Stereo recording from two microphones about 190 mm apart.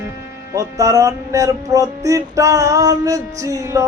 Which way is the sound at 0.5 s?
15° right (ahead or behind).